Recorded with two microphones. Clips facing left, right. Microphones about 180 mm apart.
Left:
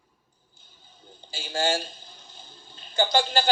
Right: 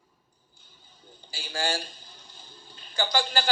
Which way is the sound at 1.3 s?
25° left (ahead or behind).